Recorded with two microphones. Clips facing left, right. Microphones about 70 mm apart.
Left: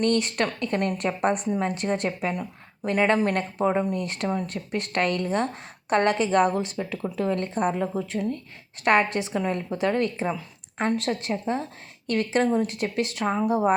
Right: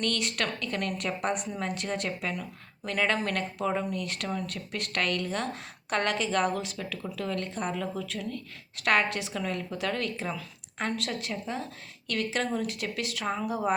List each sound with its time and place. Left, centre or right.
0.0 s a woman's voice: left